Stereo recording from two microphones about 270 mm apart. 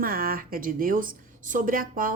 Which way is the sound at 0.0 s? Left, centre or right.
Right.